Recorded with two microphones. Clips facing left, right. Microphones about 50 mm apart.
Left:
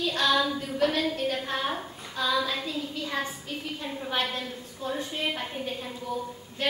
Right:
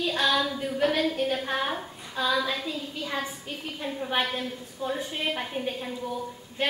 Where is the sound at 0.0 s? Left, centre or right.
Centre.